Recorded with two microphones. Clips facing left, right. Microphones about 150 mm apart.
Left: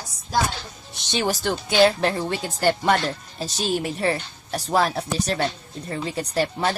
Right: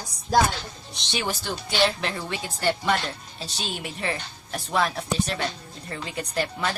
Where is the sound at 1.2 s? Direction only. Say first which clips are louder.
Left 8 dB; 45° left (ahead or behind).